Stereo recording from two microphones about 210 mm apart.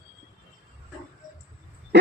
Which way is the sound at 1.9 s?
55° right (ahead or behind).